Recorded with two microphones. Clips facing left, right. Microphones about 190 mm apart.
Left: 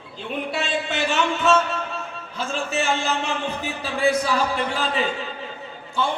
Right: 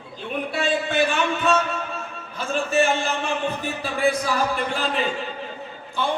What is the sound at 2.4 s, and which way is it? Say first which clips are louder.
A man's voice: right 4 dB; 55° right (ahead or behind).